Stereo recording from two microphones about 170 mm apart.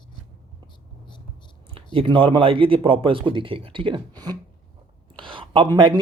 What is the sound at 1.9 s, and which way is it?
Speech, 30° right (ahead or behind).